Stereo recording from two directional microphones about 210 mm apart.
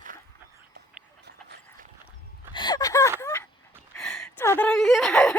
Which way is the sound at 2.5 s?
20° left (ahead or behind).